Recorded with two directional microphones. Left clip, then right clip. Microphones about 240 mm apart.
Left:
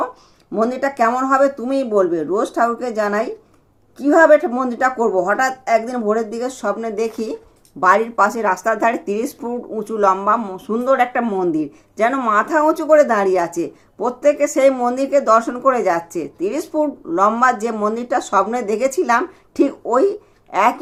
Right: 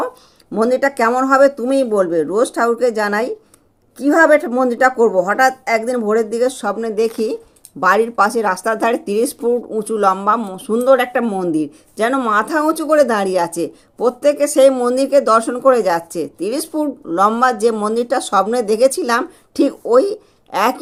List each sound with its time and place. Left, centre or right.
0.5 s speech: right